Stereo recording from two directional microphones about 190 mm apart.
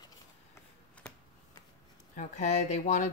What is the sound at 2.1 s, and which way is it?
Speech, 40° left (ahead or behind).